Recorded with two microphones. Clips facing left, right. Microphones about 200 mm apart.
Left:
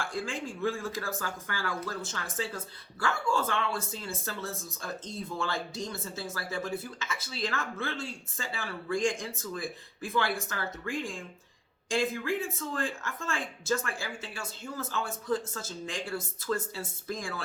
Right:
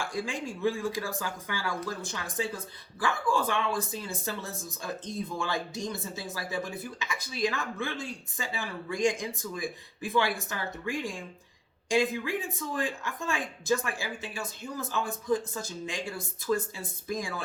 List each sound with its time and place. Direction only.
0.0 s speech: 15° right (ahead or behind)